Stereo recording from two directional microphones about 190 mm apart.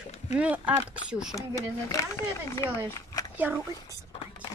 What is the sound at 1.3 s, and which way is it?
Speech, 15° left (ahead or behind).